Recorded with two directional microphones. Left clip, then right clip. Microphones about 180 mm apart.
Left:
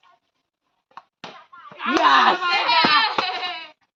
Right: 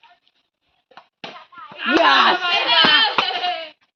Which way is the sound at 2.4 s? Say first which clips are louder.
Right 2 dB; 10° left (ahead or behind).